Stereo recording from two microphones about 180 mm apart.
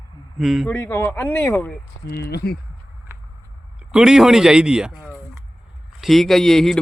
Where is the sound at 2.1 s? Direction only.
65° left (ahead or behind).